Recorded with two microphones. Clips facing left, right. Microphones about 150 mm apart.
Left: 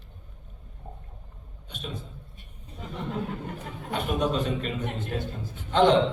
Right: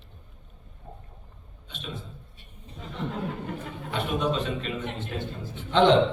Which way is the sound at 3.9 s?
45° left (ahead or behind).